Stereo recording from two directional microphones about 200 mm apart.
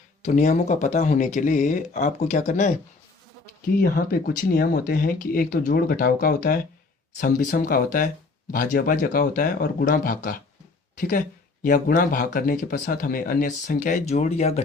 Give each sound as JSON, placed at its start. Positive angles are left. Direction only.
{"t": 0.2, "sound": "speech", "side_deg": 40}
{"t": 3.8, "sound": "speech", "side_deg": 45}
{"t": 11.6, "sound": "speech", "side_deg": 40}